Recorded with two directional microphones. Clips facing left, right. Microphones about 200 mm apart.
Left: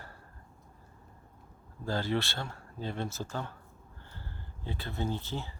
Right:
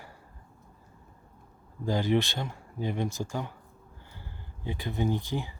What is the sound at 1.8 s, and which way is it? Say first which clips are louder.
Speech: right 5 dB; 15° right (ahead or behind).